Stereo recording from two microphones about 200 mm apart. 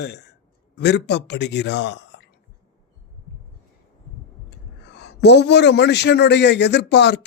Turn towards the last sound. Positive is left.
turn(degrees=60)  # may be behind; listen again after turning